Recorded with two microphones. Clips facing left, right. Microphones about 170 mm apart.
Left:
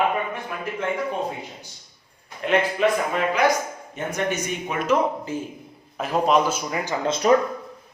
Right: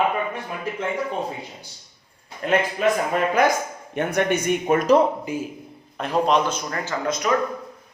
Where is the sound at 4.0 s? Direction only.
65° right (ahead or behind); by 5.0 s 40° right (ahead or behind).